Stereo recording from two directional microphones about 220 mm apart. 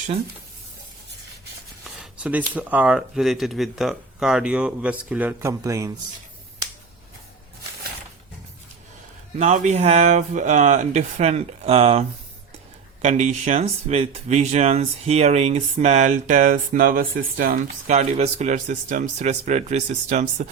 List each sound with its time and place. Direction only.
1.8 s speech: 5° right (ahead or behind)
9.4 s speech: 30° right (ahead or behind)